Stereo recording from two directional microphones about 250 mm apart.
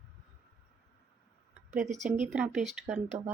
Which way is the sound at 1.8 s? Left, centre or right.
Right.